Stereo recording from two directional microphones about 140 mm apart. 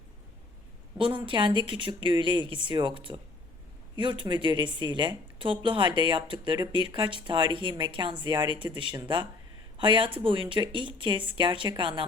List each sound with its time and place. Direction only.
0.9 s a woman's voice: 35° right (ahead or behind)